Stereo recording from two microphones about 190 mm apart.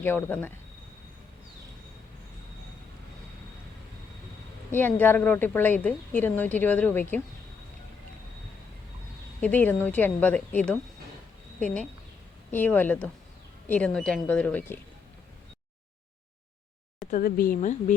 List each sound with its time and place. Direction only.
0.0 s a woman's voice: 10° left (ahead or behind)
4.7 s a woman's voice: 10° left (ahead or behind)
9.4 s a woman's voice: 10° left (ahead or behind)
17.1 s speech: 50° left (ahead or behind)